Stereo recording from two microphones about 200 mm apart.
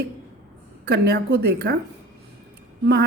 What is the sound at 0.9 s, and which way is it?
Speech, 55° right (ahead or behind).